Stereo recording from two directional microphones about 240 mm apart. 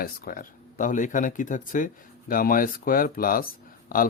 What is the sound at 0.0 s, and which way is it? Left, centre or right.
Mantra, left.